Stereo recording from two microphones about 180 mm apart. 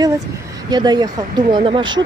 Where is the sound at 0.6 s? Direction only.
25° right (ahead or behind).